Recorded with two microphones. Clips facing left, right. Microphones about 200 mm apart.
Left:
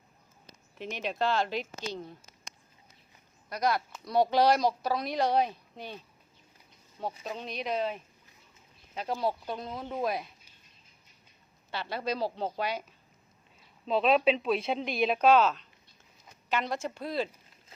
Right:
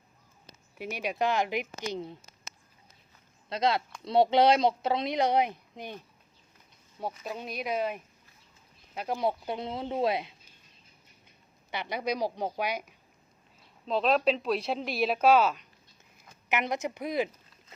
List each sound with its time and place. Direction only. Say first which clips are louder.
0.8 s speech: right 1 dB; 10° right (ahead or behind)
3.5 s speech: right 2 dB; 25° right (ahead or behind)
7.3 s speech: right 1 dB; 10° right (ahead or behind)
9.2 s speech: right 3 dB; 25° right (ahead or behind)
11.7 s speech: right 1 dB; 15° right (ahead or behind)
13.8 s speech: left 1 dB; centre (ahead or behind)
16.5 s speech: right 1 dB; 20° right (ahead or behind)